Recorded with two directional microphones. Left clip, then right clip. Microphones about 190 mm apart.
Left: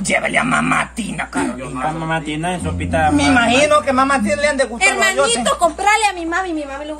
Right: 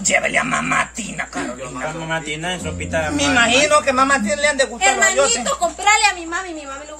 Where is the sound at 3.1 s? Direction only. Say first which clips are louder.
Right 1 dB; centre (ahead or behind).